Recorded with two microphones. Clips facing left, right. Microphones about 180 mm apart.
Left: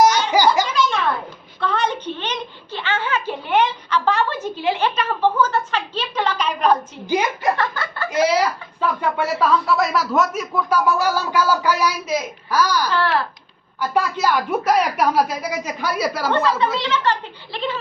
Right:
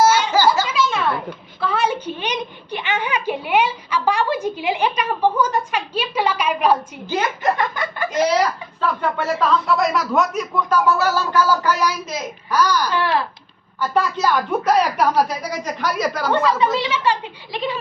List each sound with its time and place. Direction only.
0.0 s giggle: 15° left (ahead or behind)
0.7 s a sound: 5° right (ahead or behind)
7.1 s speech: 15° left (ahead or behind)
7.5 s a sound: 15° right (ahead or behind)
8.1 s speech: 10° left (ahead or behind)
12.9 s a woman's voice: 15° right (ahead or behind)
13.7 s speech: 10° left (ahead or behind)
16.3 s a woman's voice: 10° right (ahead or behind)